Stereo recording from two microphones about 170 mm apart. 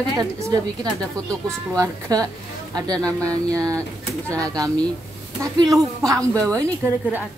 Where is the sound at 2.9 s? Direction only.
5° left (ahead or behind).